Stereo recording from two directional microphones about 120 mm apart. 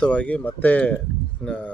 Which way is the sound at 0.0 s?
10° left (ahead or behind).